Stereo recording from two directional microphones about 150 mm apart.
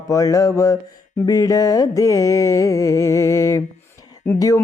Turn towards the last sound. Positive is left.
turn(degrees=20)  # may be behind; listen again after turning